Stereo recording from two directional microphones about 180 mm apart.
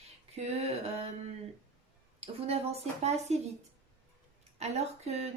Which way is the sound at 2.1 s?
35° right (ahead or behind).